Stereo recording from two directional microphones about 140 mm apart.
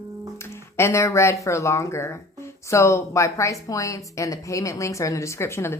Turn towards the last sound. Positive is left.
turn(degrees=20)  # may be behind; listen again after turning